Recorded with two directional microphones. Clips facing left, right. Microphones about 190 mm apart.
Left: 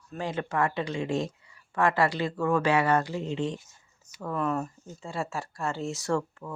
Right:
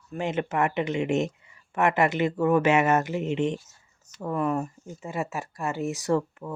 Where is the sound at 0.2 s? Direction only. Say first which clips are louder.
Right 3 dB; 20° right (ahead or behind).